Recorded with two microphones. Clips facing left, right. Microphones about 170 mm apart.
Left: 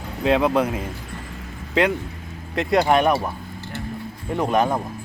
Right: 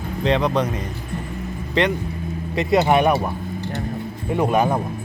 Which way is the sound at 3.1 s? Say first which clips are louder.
Right 2 dB; 15° right (ahead or behind).